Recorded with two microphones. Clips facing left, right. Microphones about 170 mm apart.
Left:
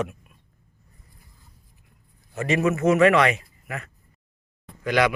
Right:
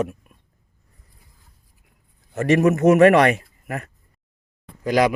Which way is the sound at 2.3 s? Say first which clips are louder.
Right 6 dB; 50° right (ahead or behind).